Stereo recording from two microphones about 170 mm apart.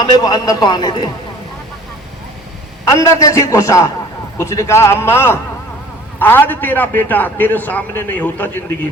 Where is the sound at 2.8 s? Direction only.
20° left (ahead or behind).